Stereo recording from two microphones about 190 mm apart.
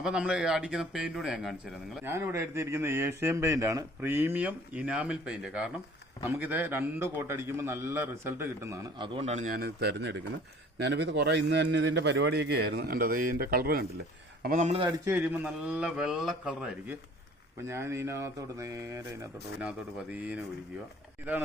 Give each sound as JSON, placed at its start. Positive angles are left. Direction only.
{"t": 0.0, "sound": "a man's voice", "side_deg": -5}
{"t": 2.0, "sound": "a man's voice", "side_deg": -15}
{"t": 9.1, "sound": "a man's voice", "side_deg": -35}
{"t": 14.8, "sound": "a man's voice", "side_deg": -15}
{"t": 17.7, "sound": "a man's voice", "side_deg": -15}